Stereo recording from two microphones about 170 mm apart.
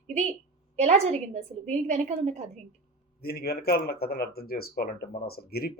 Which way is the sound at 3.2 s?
65° left (ahead or behind).